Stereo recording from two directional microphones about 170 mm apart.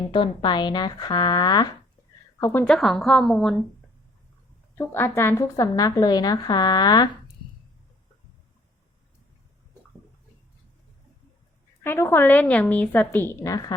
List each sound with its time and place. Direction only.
0.1 s a woman's voice: 30° left (ahead or behind)
2.4 s a woman's voice: 10° left (ahead or behind)
2.7 s a woman's voice: centre (ahead or behind)
4.7 s a woman's voice: 15° left (ahead or behind)
11.8 s a woman's voice: 15° left (ahead or behind)